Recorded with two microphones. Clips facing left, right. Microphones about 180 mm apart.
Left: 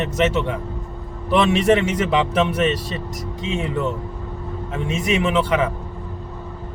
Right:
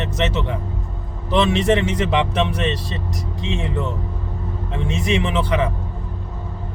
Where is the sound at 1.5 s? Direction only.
20° right (ahead or behind).